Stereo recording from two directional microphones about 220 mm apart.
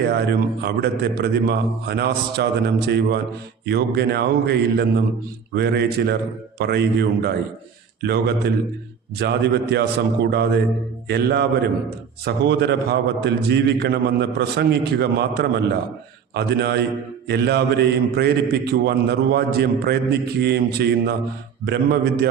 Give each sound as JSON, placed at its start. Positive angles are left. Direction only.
{"t": 0.1, "sound": "a man's voice", "side_deg": -50}